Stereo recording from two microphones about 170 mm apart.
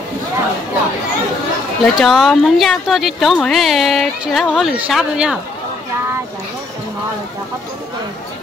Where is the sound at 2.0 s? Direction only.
Centre (ahead or behind).